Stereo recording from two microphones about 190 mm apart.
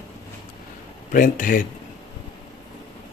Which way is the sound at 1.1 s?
45° left (ahead or behind).